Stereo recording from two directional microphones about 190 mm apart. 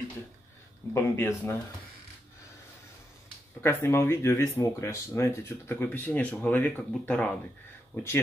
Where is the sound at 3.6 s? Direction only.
15° left (ahead or behind).